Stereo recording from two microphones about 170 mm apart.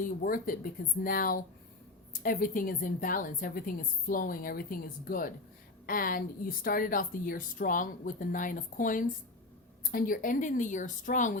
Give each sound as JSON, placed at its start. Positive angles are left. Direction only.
{"t": 0.0, "sound": "a woman's voice", "side_deg": 55}